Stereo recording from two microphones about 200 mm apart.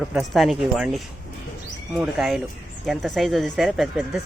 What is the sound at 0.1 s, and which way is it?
Speech, centre (ahead or behind).